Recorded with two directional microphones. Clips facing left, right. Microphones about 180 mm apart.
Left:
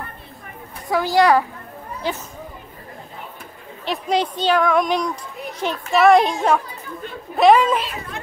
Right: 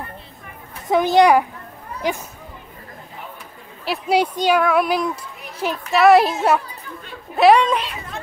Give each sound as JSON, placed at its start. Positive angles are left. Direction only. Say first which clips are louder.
{"t": 0.8, "sound": "a woman's voice", "louder": "right 2 dB", "side_deg": -20}
{"t": 3.8, "sound": "a child's voice", "louder": "right 2 dB", "side_deg": -5}